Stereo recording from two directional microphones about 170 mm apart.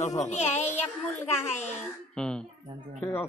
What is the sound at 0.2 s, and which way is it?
Speech, 40° left (ahead or behind).